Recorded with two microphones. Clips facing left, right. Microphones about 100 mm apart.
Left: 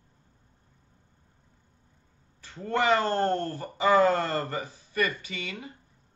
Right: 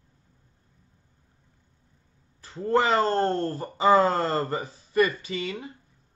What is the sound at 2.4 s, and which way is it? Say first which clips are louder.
Speech: right 4 dB; 35° right (ahead or behind).